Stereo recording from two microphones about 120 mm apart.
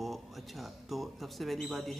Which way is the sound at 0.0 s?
Centre (ahead or behind).